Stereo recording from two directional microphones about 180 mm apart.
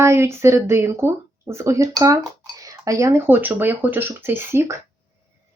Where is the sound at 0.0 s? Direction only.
15° right (ahead or behind).